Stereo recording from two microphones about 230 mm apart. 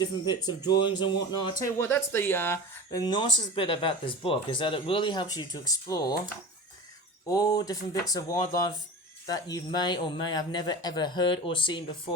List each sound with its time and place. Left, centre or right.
0.0 s speech: centre
7.3 s speech: centre